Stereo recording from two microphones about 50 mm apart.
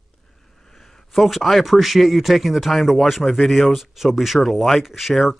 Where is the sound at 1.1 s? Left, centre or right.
Centre.